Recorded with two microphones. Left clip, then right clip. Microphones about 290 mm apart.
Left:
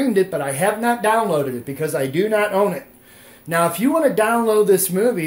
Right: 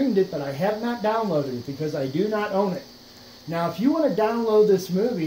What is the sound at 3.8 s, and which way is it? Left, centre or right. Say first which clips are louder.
Speech: left 1 dB; left.